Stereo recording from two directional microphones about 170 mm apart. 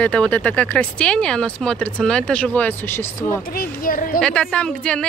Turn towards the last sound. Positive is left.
turn(degrees=5)  # may be behind; listen again after turning